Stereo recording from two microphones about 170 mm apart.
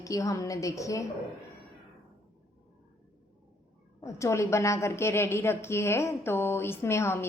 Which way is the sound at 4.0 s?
15° left (ahead or behind).